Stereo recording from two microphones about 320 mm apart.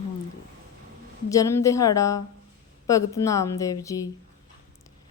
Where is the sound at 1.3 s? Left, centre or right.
Centre.